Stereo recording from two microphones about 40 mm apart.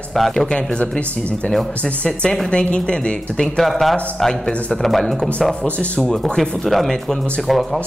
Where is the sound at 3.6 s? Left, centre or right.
Centre.